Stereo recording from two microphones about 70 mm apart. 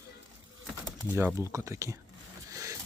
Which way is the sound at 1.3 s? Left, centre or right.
Right.